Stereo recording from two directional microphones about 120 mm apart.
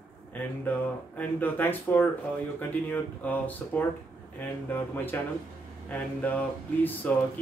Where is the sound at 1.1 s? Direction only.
15° left (ahead or behind).